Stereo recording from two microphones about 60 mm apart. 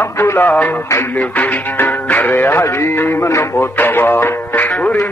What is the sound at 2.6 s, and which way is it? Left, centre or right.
Music, left.